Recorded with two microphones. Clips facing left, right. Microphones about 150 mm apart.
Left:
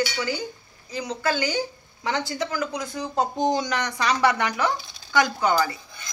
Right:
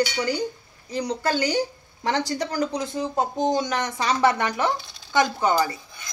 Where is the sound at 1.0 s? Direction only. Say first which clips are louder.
Right 2 dB; 35° right (ahead or behind).